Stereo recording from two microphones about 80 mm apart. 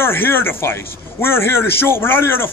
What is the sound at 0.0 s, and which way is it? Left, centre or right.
A man's voice, left.